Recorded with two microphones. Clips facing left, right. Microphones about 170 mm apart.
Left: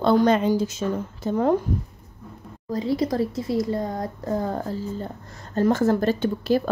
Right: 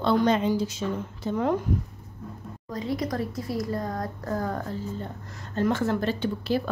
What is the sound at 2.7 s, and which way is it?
A woman's voice, 30° left (ahead or behind).